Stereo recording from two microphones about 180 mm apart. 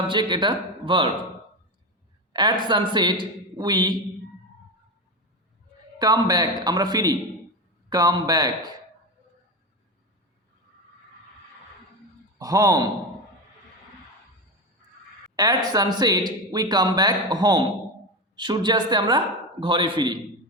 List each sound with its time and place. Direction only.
0.1 s speech: 25° right (ahead or behind)
2.3 s a woman's voice: 25° right (ahead or behind)
6.0 s speech: 20° right (ahead or behind)
12.4 s speech: 20° right (ahead or behind)
15.4 s speech: 20° right (ahead or behind)